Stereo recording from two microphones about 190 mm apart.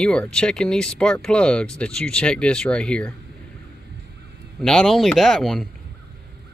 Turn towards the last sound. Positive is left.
turn(degrees=0)  # may be behind; listen again after turning